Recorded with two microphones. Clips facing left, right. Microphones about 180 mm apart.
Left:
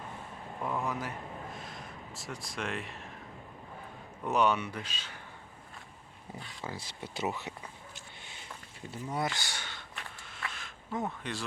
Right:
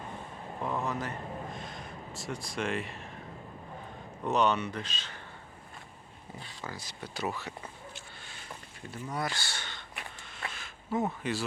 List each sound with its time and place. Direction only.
0.6 s speech: 10° left (ahead or behind)
1.5 s a sound: centre (ahead or behind)
4.2 s speech: 10° left (ahead or behind)
6.7 s speech: 25° left (ahead or behind)
8.9 s speech: 25° left (ahead or behind)
10.5 s a sound: 5° right (ahead or behind)